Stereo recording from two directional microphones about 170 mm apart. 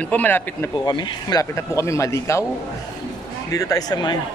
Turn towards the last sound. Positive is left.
turn(degrees=25)  # may be behind; listen again after turning